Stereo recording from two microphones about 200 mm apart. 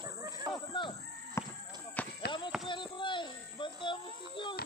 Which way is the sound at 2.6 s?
25° left (ahead or behind).